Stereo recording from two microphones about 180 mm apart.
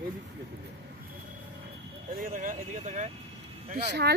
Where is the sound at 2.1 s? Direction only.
50° right (ahead or behind).